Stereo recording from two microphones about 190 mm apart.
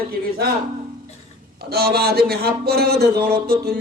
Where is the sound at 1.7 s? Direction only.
55° right (ahead or behind).